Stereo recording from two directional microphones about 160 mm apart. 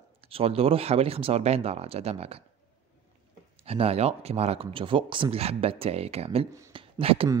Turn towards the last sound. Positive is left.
turn(degrees=-35)  # may be behind; listen again after turning